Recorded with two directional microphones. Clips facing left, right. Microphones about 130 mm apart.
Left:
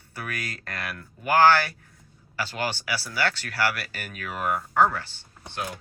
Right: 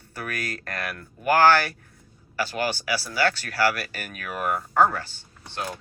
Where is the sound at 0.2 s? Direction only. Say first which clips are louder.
Right 3 dB; 20° left (ahead or behind).